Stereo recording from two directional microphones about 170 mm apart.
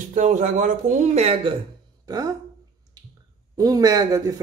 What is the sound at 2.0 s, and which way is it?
Speech, 25° right (ahead or behind).